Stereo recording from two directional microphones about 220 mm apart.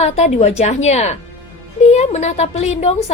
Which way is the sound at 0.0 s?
30° left (ahead or behind).